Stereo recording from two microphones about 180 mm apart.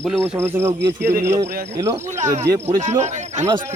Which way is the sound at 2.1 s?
45° right (ahead or behind).